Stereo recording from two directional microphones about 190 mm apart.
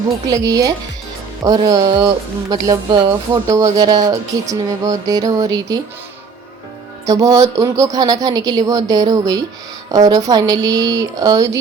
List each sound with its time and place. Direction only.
0.3 s a woman's voice: 20° right (ahead or behind)
7.1 s a woman's voice: 20° right (ahead or behind)